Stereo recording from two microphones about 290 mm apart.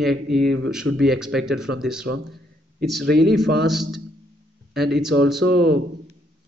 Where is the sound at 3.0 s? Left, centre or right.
Right.